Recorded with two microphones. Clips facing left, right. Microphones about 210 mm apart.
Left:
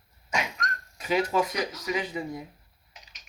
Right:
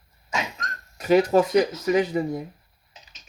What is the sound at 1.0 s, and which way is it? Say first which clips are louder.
Speech: right 8 dB; 40° right (ahead or behind).